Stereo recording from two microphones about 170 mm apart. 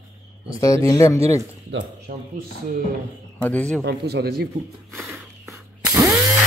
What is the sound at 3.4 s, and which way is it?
Speech, 10° left (ahead or behind).